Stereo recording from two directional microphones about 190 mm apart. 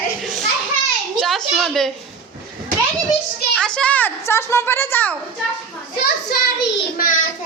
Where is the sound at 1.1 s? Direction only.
Centre (ahead or behind).